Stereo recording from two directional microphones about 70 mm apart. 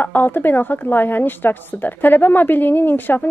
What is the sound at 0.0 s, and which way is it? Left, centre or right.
A woman's voice, left.